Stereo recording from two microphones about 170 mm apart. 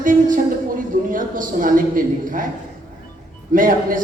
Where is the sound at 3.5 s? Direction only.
55° right (ahead or behind).